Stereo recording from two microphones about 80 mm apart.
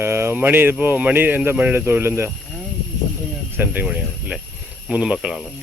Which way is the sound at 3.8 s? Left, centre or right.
Centre.